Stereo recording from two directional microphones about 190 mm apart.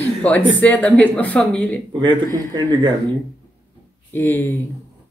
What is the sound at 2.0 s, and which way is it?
Speech, 20° right (ahead or behind).